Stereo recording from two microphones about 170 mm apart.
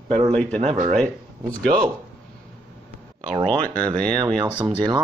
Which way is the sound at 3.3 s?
30° right (ahead or behind).